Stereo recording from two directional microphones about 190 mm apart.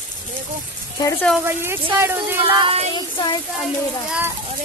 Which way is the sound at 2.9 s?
25° left (ahead or behind).